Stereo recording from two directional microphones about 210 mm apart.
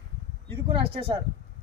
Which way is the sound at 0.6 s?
25° right (ahead or behind).